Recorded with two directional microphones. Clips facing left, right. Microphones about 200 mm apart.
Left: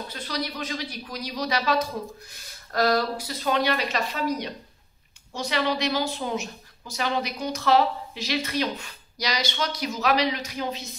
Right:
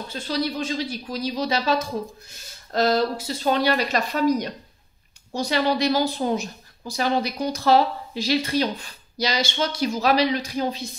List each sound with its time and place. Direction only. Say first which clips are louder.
0.1 s a woman's voice: right 8 dB; 25° right (ahead or behind)